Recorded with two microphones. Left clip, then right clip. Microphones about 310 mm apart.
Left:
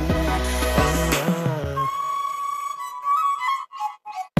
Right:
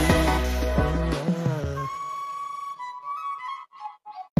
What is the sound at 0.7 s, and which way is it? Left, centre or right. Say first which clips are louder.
Music: left 8 dB; left.